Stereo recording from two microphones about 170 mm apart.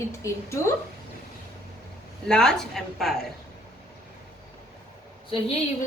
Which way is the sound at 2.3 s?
5° left (ahead or behind).